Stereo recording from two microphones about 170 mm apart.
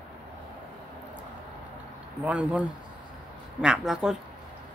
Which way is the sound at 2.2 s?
5° right (ahead or behind).